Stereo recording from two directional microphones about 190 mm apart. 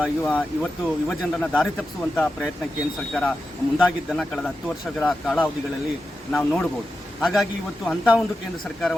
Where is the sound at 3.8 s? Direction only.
5° left (ahead or behind).